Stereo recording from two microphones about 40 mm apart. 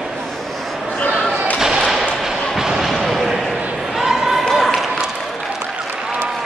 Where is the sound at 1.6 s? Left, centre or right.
Centre.